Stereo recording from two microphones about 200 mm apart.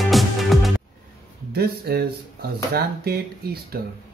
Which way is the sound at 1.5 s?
55° right (ahead or behind).